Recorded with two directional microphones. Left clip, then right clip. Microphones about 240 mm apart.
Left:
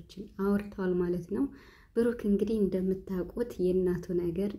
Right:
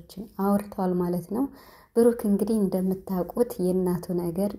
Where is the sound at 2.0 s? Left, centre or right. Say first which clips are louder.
Right 7 dB; centre.